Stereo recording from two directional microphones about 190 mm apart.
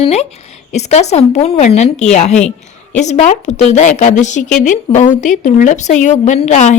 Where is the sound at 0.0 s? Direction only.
35° left (ahead or behind).